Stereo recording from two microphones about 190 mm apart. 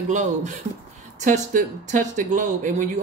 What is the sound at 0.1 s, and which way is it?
Speech, 40° right (ahead or behind).